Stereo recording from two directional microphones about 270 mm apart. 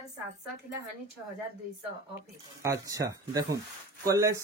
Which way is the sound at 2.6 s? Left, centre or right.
Centre.